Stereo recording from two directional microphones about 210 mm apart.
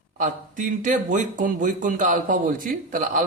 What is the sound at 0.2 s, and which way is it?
Speech, 40° right (ahead or behind).